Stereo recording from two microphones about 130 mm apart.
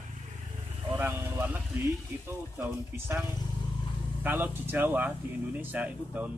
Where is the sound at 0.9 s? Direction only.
15° right (ahead or behind).